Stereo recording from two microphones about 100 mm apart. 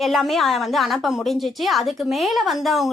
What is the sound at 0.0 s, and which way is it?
Speech, centre (ahead or behind).